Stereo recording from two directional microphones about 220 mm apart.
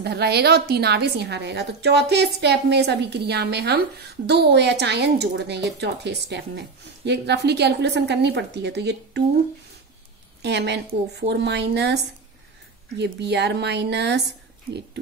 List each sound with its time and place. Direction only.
0.0 s a woman's voice: 45° right (ahead or behind)
10.4 s a woman's voice: 50° right (ahead or behind)